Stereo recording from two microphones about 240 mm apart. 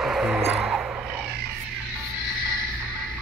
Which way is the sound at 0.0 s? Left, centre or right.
Centre.